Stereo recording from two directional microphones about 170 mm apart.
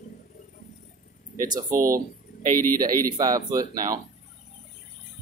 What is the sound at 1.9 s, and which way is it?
Speech, 55° right (ahead or behind).